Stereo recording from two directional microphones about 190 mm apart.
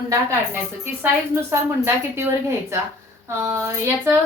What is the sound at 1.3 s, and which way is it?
A woman's voice, 15° right (ahead or behind).